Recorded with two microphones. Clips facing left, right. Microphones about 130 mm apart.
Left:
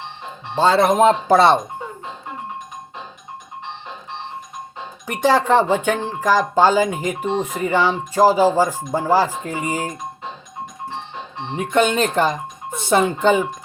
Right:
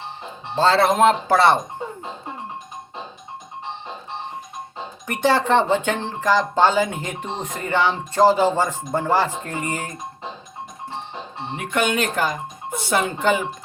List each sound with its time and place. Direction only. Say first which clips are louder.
0.5 s speech: left 2 dB; 15° left (ahead or behind)
5.0 s speech: left 2 dB; 15° left (ahead or behind)
11.7 s speech: left 4 dB; 25° left (ahead or behind)